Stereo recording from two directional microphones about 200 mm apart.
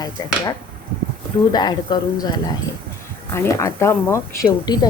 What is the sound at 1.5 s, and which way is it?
Speech, 20° left (ahead or behind).